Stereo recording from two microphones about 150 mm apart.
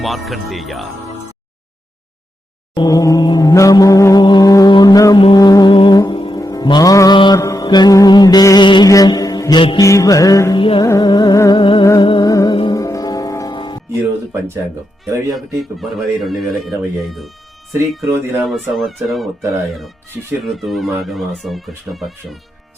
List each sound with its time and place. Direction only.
0.0 s speech: centre (ahead or behind)
2.7 s music: 25° left (ahead or behind)
7.3 s mantra: 20° left (ahead or behind)
9.8 s music: 20° left (ahead or behind)
10.6 s music: 35° left (ahead or behind)
10.8 s music: 25° left (ahead or behind)
15.4 s speech: centre (ahead or behind)
18.1 s speech: 15° right (ahead or behind)
18.4 s speech: centre (ahead or behind)